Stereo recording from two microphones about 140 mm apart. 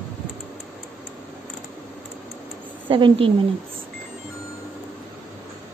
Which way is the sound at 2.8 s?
35° right (ahead or behind).